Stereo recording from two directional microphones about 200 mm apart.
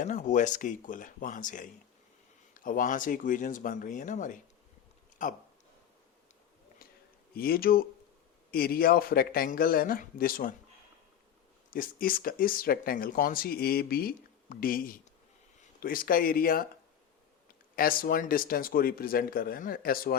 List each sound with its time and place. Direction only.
0.0 s speech: 40° left (ahead or behind)
7.3 s speech: 50° left (ahead or behind)
11.7 s speech: 45° left (ahead or behind)
17.7 s speech: 45° left (ahead or behind)